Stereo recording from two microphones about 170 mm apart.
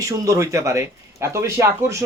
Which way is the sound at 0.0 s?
20° right (ahead or behind).